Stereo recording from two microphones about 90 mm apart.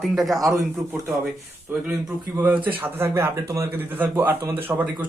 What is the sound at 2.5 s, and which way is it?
Speech, 70° right (ahead or behind).